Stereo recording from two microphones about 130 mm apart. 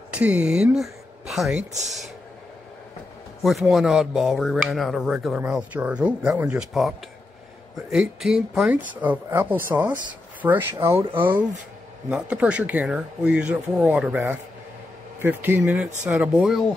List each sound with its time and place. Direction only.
0.1 s speech: 10° right (ahead or behind)
1.6 s speech: 60° right (ahead or behind)
3.4 s speech: centre (ahead or behind)
7.9 s speech: 5° right (ahead or behind)